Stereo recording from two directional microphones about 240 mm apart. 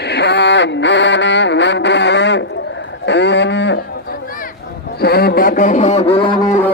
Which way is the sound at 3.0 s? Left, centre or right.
Left.